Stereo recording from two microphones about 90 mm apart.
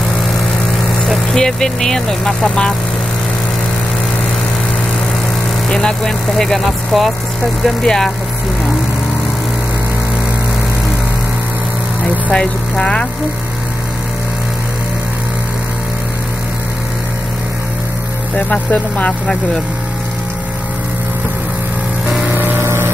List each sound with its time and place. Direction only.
1.0 s speech: 5° left (ahead or behind)
5.7 s speech: 10° left (ahead or behind)
12.3 s speech: 10° left (ahead or behind)
18.5 s speech: 15° left (ahead or behind)
22.3 s vehicle: 25° right (ahead or behind)